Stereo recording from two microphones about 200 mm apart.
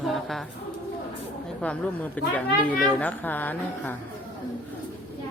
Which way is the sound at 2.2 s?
5° left (ahead or behind).